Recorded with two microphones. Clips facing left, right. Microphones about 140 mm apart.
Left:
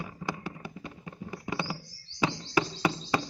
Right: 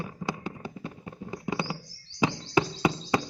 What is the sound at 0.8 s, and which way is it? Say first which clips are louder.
Fireworks: right 2 dB; 10° right (ahead or behind).